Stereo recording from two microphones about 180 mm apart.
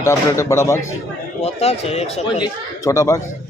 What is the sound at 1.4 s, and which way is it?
A man's voice, 35° left (ahead or behind).